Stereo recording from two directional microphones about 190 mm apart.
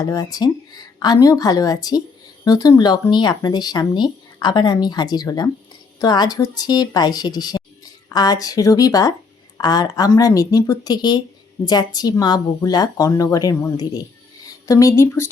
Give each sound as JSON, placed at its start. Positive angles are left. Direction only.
{"t": 0.0, "sound": "a woman's voice", "side_deg": 20}